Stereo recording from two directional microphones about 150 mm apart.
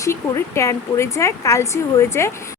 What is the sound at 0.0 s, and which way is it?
Speech, 20° left (ahead or behind).